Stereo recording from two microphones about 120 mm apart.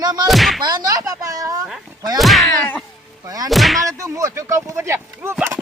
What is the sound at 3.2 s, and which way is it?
Speech, 30° right (ahead or behind).